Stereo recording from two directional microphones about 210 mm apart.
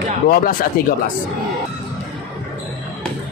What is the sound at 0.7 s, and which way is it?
Speech, 45° left (ahead or behind).